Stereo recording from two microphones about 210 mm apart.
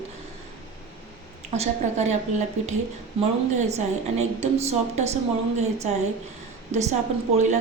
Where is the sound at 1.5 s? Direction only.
30° right (ahead or behind).